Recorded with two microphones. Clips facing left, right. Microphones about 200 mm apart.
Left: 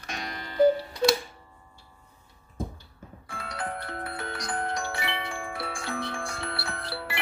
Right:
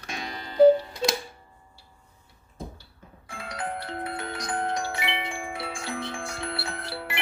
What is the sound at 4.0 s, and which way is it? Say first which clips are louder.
Music: right 2 dB; 20° right (ahead or behind).